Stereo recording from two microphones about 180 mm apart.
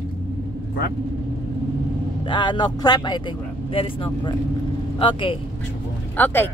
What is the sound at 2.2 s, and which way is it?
Speech, 25° left (ahead or behind).